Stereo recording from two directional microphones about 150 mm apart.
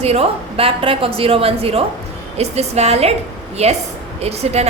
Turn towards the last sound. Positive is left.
turn(degrees=-45)  # may be behind; listen again after turning